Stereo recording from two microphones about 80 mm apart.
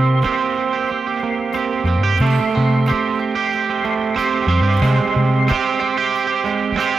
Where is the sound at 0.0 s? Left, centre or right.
Centre.